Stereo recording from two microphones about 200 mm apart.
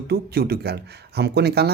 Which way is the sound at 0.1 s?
50° right (ahead or behind).